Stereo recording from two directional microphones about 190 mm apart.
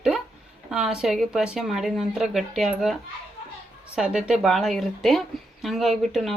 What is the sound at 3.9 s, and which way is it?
Speech, 5° right (ahead or behind).